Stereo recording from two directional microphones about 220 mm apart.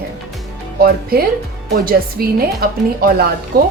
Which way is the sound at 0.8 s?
45° right (ahead or behind).